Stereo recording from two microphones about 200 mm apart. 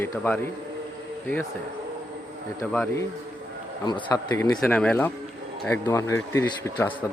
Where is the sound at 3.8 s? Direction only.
20° left (ahead or behind).